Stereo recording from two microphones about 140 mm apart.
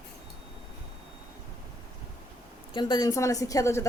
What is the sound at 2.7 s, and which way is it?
A woman's voice, 30° left (ahead or behind).